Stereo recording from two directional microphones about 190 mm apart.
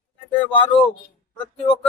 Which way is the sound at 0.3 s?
25° left (ahead or behind).